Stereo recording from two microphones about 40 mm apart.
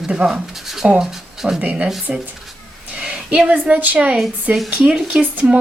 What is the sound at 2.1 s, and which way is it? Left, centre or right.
Speech, right.